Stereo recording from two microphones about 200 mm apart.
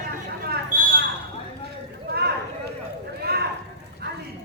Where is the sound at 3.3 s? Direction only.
55° right (ahead or behind).